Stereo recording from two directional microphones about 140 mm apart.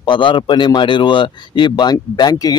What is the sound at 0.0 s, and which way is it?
Speech, 35° left (ahead or behind).